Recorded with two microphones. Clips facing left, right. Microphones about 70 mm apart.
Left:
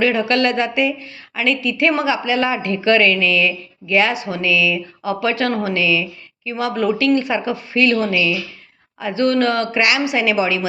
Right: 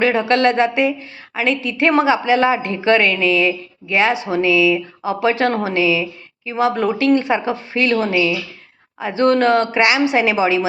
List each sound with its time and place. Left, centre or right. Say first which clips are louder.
0.0 s speech: right 2 dB; right